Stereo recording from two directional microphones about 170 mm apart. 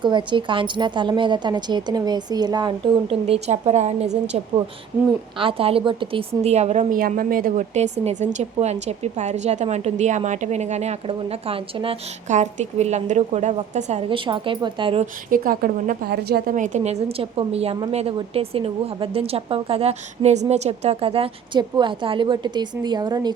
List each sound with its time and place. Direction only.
0.0 s a woman's voice: 25° right (ahead or behind)
6.9 s a woman's voice: 55° right (ahead or behind); by 11.9 s 35° right (ahead or behind)
12.3 s a woman's voice: 45° right (ahead or behind)
14.1 s a woman's voice: 30° right (ahead or behind)
15.3 s a woman's voice: 55° right (ahead or behind)
16.6 s a woman's voice: 45° right (ahead or behind); by 23.3 s 25° right (ahead or behind)